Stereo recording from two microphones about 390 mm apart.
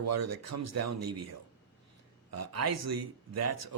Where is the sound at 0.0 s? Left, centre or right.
Right.